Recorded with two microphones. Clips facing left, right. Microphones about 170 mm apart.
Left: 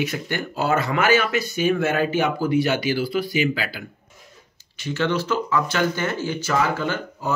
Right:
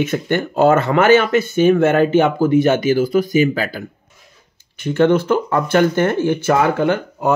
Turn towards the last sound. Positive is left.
turn(degrees=-60)  # may be behind; listen again after turning